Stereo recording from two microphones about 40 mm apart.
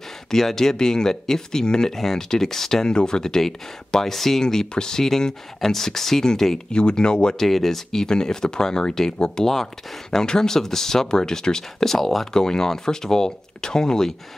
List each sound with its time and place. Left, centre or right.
0.3 s speech: centre
6.7 s speech: left
7.3 s speech: centre